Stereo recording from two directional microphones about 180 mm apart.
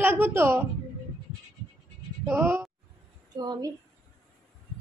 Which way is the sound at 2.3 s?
15° right (ahead or behind).